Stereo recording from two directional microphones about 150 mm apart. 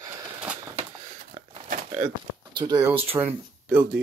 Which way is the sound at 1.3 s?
45° right (ahead or behind).